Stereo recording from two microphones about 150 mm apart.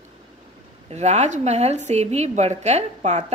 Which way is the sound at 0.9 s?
50° right (ahead or behind).